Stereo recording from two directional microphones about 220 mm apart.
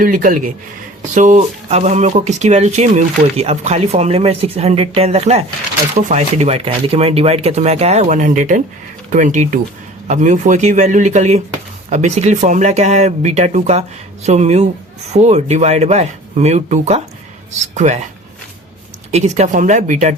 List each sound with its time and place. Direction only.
0.0 s speech: 40° right (ahead or behind)
19.1 s speech: 30° right (ahead or behind)